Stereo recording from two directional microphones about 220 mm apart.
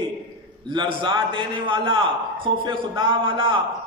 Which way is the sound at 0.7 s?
20° right (ahead or behind).